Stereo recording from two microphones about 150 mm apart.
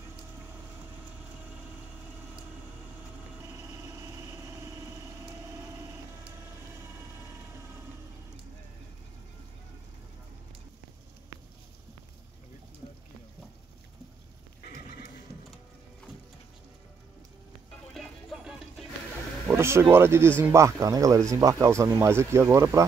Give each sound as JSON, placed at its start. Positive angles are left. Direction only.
{"t": 3.5, "sound": "vehicle", "side_deg": -20}
{"t": 17.9, "sound": "music", "side_deg": 0}
{"t": 19.4, "sound": "speech", "side_deg": -15}